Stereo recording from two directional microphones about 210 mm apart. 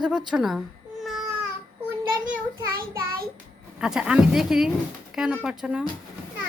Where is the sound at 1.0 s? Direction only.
Centre (ahead or behind).